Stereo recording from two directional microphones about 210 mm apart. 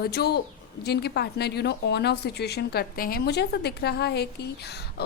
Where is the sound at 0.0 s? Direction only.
50° left (ahead or behind).